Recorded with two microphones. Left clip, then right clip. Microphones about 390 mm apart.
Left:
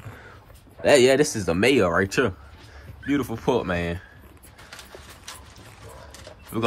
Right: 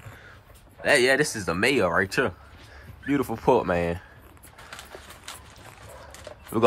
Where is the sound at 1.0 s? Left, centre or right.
Centre.